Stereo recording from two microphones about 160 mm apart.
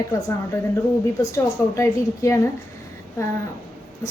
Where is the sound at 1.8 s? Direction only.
20° left (ahead or behind).